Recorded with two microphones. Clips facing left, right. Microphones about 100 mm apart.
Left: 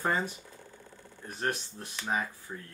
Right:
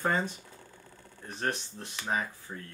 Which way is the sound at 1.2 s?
10° left (ahead or behind).